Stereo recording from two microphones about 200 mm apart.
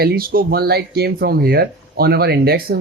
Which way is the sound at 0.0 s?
50° right (ahead or behind).